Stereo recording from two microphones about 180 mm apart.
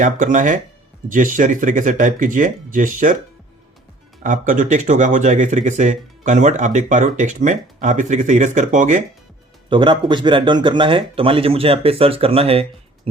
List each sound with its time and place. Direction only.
0.0 s speech: 45° right (ahead or behind)
4.2 s speech: 45° right (ahead or behind)
9.6 s speech: 25° right (ahead or behind)